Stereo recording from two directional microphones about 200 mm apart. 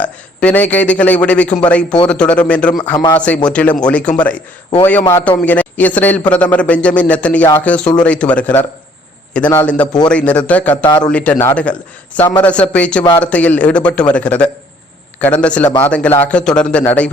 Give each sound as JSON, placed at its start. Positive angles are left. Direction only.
{"t": 0.0, "sound": "a man's voice", "side_deg": 5}
{"t": 2.9, "sound": "a man's voice", "side_deg": 20}
{"t": 3.2, "sound": "a man's voice", "side_deg": 5}
{"t": 10.8, "sound": "a man's voice", "side_deg": 20}
{"t": 11.1, "sound": "a man's voice", "side_deg": 5}